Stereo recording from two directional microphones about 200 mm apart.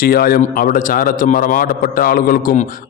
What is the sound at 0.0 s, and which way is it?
A man's voice, 50° left (ahead or behind).